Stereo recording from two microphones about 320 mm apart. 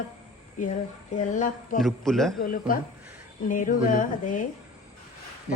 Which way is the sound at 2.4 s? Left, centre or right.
Left.